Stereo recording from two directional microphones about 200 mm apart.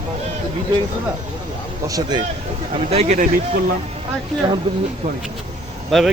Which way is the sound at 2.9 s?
35° right (ahead or behind).